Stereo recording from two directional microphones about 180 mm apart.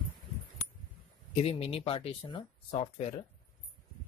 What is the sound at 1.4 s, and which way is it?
Speech, 35° left (ahead or behind).